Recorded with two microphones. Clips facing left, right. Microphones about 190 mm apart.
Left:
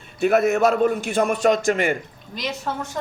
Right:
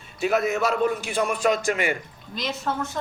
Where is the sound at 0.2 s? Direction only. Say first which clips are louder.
Left 5 dB; 55° left (ahead or behind).